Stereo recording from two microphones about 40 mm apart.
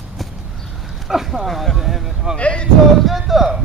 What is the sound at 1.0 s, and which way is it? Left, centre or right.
Speech, centre.